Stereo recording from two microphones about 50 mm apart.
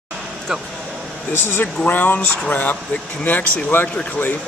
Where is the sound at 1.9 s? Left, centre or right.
Left.